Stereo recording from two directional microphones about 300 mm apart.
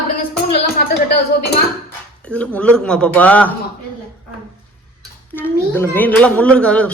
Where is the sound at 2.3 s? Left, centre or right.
Centre.